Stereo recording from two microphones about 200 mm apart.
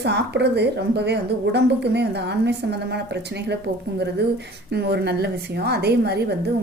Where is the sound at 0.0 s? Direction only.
55° right (ahead or behind).